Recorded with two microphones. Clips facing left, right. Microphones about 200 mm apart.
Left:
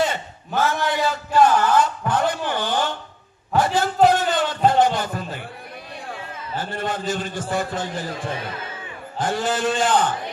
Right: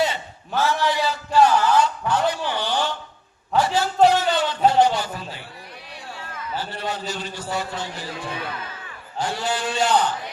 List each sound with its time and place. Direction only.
0.1 s a sound: 50° left (ahead or behind)
3.6 s a man's voice: 50° left (ahead or behind)
4.0 s music: 50° left (ahead or behind)
6.6 s a man's voice: 50° left (ahead or behind)